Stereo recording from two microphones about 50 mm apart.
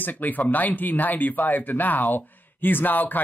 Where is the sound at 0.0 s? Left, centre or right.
Left.